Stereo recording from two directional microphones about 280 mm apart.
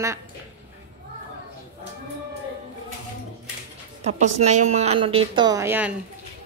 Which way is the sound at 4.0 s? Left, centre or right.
Right.